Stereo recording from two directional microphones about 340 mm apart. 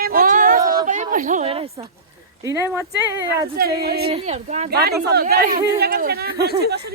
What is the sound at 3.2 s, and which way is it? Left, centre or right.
Speech, right.